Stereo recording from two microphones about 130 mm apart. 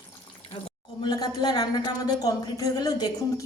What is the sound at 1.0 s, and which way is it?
Speech, 30° left (ahead or behind).